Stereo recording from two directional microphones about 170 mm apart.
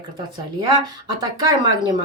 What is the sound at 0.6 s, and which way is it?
Speech, 25° right (ahead or behind).